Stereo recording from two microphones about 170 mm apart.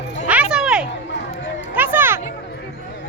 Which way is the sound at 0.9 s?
90° left.